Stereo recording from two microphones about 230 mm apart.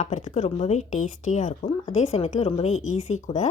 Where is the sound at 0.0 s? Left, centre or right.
Left.